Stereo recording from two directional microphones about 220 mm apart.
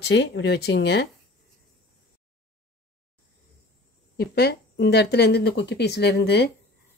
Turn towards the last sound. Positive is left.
turn(degrees=50)  # may be behind; listen again after turning